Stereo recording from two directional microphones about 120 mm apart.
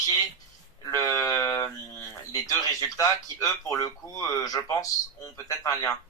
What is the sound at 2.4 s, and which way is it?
Speech, 30° left (ahead or behind).